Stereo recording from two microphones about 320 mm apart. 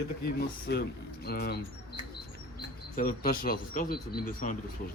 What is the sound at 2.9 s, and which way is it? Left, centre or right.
Speech, left.